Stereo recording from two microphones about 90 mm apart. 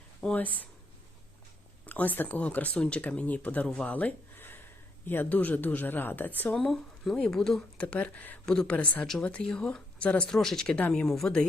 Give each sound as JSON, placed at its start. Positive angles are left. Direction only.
{"t": 0.2, "sound": "speech", "side_deg": 15}
{"t": 1.8, "sound": "speech", "side_deg": 20}
{"t": 6.6, "sound": "speech", "side_deg": 5}